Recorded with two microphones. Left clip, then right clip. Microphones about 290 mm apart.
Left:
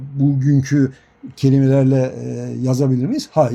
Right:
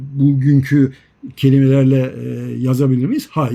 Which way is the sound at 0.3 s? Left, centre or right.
Left.